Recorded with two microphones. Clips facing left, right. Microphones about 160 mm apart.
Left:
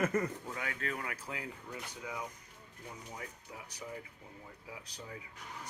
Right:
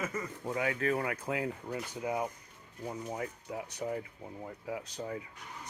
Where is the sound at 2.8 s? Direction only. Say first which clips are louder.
Right 9 dB; 45° right (ahead or behind).